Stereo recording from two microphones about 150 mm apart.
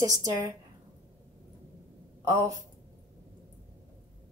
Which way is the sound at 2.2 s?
20° right (ahead or behind).